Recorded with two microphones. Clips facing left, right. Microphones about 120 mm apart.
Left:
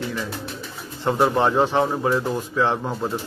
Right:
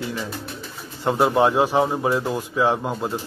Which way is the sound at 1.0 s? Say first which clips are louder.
Right 1 dB; 10° right (ahead or behind).